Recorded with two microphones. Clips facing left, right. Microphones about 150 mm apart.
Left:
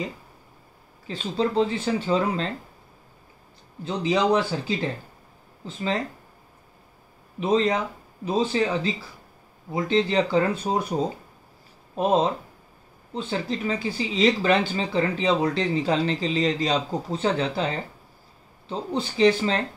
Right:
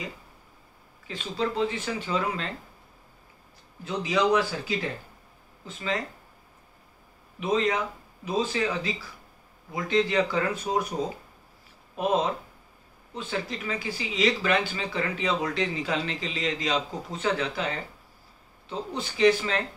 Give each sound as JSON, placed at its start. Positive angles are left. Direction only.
{"t": 1.0, "sound": "speech", "side_deg": 35}
{"t": 3.8, "sound": "speech", "side_deg": 30}
{"t": 7.3, "sound": "speech", "side_deg": 30}
{"t": 11.9, "sound": "speech", "side_deg": 30}
{"t": 18.7, "sound": "speech", "side_deg": 30}